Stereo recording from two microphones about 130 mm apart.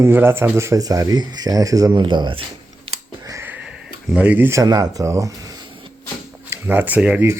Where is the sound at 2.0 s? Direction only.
35° right (ahead or behind).